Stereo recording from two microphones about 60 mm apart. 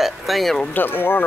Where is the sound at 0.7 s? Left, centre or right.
Left.